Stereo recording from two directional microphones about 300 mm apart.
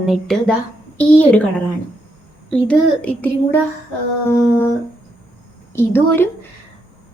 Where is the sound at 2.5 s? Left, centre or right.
Centre.